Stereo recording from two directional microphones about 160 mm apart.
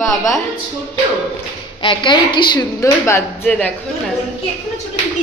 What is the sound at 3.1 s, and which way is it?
Speech, 15° left (ahead or behind).